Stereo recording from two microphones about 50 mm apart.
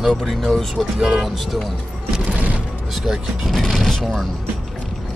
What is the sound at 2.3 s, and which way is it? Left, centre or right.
Music, right.